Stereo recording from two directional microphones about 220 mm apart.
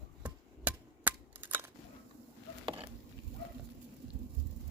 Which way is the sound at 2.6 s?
25° right (ahead or behind).